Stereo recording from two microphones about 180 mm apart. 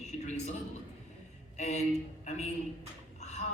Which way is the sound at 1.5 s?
40° left (ahead or behind).